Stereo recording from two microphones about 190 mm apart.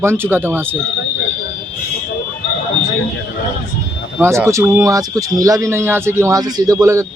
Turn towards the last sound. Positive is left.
turn(degrees=-15)  # may be behind; listen again after turning